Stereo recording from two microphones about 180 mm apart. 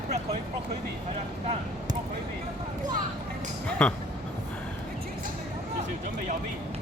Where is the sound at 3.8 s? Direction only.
5° left (ahead or behind).